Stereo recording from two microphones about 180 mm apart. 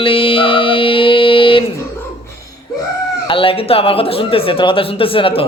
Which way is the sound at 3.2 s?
30° left (ahead or behind).